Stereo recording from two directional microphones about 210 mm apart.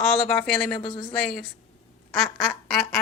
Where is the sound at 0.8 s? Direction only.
20° left (ahead or behind).